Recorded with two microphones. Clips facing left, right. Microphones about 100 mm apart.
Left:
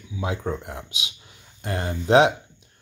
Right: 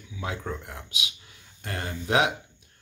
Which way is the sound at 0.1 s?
20° left (ahead or behind).